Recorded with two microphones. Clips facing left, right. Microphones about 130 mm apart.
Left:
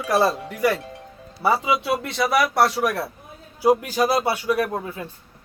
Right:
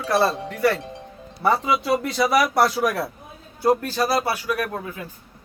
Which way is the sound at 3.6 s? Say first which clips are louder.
Left 2 dB; 10° left (ahead or behind).